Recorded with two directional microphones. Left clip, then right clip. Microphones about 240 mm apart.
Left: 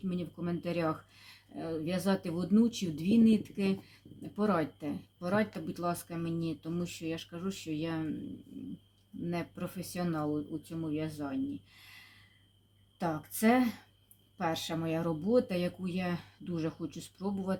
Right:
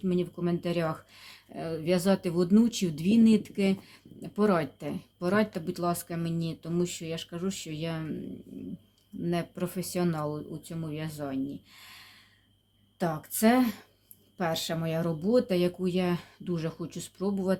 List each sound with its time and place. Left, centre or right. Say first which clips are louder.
0.1 s speech: right 9 dB; right
9.3 s speech: right 6 dB; right
13.0 s speech: right 5 dB; right